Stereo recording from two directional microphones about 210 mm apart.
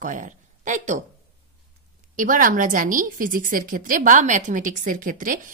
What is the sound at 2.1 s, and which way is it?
A woman's voice, 40° right (ahead or behind).